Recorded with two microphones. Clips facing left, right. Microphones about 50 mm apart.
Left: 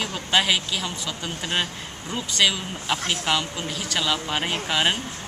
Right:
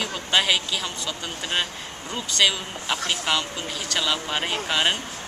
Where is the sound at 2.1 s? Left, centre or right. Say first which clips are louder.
Even; centre.